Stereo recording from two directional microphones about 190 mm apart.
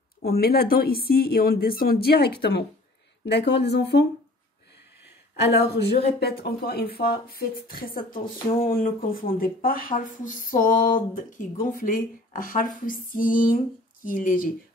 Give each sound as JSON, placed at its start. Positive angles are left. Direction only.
{"t": 0.2, "sound": "speech", "side_deg": 55}
{"t": 5.3, "sound": "speech", "side_deg": 60}